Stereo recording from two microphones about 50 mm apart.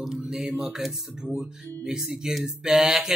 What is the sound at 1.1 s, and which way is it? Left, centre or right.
Speech, centre.